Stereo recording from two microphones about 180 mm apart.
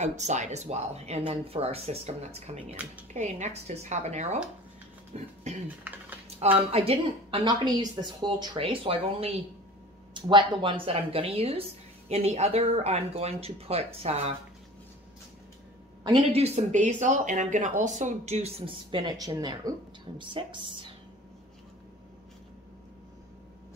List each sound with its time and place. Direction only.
0.0 s a woman's voice: 40° right (ahead or behind)
2.7 s speech: 10° right (ahead or behind)
3.1 s a woman's voice: 40° right (ahead or behind)
16.0 s a woman's voice: 30° right (ahead or behind)